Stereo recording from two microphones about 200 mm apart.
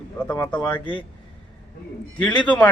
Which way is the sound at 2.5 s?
5° left (ahead or behind).